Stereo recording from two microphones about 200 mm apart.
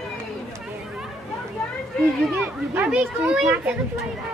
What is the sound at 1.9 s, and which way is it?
Speech, 5° left (ahead or behind).